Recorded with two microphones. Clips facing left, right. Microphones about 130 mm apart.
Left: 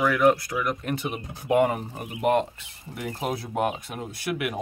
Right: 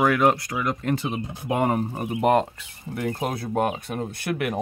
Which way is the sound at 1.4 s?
40° right (ahead or behind).